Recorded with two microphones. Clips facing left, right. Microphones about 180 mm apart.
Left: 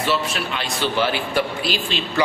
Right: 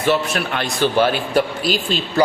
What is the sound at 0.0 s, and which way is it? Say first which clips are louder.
Speech: right 4 dB; 50° right (ahead or behind).